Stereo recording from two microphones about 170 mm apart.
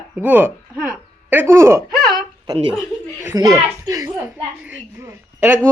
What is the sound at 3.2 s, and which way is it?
A child's voice, 20° right (ahead or behind).